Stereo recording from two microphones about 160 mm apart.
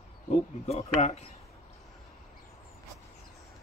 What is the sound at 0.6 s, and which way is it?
Speech, 45° left (ahead or behind).